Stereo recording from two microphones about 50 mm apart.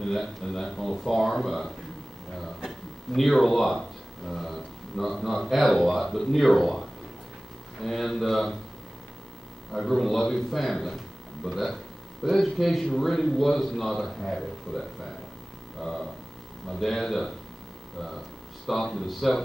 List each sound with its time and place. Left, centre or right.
0.0 s speech: centre
7.8 s speech: centre
9.7 s speech: centre
16.8 s speech: centre
18.7 s speech: centre